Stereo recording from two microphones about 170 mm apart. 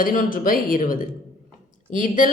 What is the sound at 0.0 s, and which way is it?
Speech, 55° left (ahead or behind).